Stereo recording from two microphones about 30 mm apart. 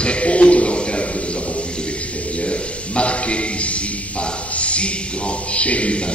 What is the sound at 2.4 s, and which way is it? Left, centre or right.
A man's voice, left.